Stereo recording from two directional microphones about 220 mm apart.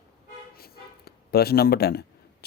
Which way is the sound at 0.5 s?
45° left (ahead or behind).